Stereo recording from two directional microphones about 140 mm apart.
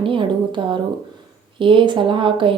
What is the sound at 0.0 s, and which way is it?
A woman's voice, 35° right (ahead or behind).